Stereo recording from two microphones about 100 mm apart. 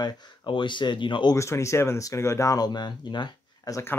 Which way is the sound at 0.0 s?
45° left (ahead or behind).